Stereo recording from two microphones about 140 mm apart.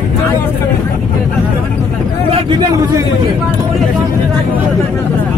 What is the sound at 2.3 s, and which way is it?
Vehicle, 35° right (ahead or behind).